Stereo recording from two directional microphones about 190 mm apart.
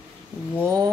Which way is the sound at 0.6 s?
15° right (ahead or behind).